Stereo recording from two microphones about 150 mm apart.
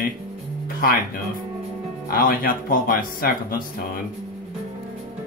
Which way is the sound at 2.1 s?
70° left (ahead or behind).